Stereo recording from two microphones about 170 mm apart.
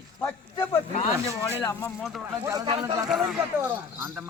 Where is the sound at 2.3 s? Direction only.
20° right (ahead or behind).